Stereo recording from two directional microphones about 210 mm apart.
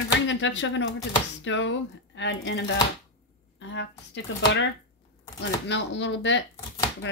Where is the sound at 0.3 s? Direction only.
60° left (ahead or behind).